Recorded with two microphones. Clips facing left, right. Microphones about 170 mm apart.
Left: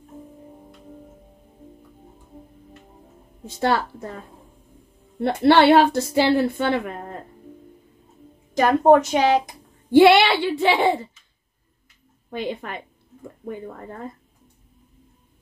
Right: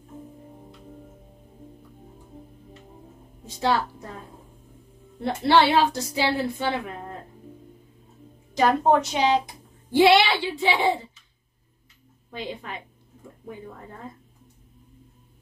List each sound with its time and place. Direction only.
5.2 s a woman's voice: 65° left (ahead or behind)
8.5 s a woman's voice: 50° left (ahead or behind)
12.3 s a woman's voice: 60° left (ahead or behind)